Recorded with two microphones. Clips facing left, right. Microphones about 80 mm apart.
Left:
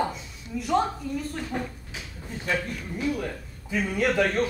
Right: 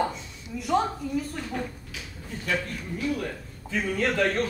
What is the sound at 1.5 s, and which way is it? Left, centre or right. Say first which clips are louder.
A man's voice: left 1 dB; left.